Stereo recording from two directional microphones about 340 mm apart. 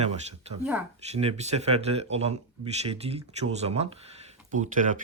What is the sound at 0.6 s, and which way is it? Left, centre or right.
Speech, centre.